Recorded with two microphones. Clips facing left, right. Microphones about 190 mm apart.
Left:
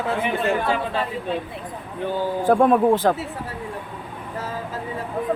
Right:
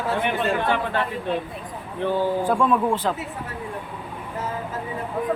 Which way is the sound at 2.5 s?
50° left (ahead or behind).